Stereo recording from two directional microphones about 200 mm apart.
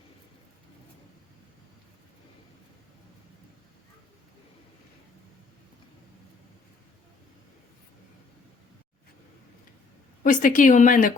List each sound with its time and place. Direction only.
10.2 s a woman's voice: 40° left (ahead or behind)